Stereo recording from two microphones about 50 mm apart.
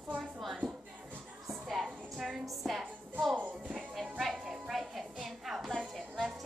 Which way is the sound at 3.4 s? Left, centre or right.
Right.